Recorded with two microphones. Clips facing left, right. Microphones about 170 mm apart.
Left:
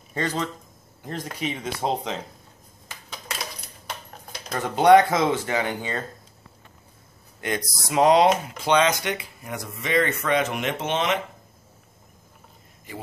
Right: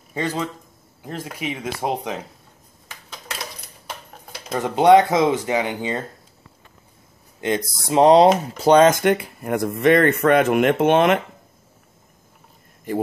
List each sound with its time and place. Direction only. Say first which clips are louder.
0.1 s speech: right 2 dB; 10° right (ahead or behind)
4.6 s speech: right 2 dB; 20° right (ahead or behind)
7.3 s speech: right 6 dB; 25° right (ahead or behind); by 11.1 s 55° right (ahead or behind)